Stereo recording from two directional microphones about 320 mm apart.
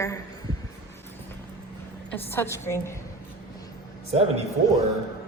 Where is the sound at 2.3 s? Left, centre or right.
Centre.